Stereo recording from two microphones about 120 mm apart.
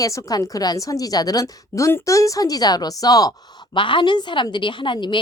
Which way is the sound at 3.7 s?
45° left (ahead or behind).